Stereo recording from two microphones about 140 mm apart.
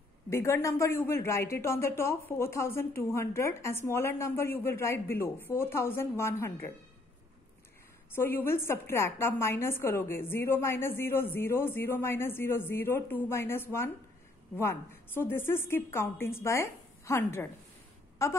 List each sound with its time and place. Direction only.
0.3 s speech: 20° left (ahead or behind)
8.1 s a woman's voice: 15° left (ahead or behind)